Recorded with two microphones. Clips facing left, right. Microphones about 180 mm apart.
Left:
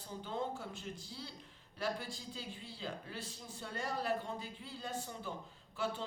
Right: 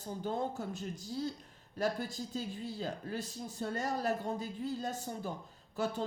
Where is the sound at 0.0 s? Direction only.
45° right (ahead or behind).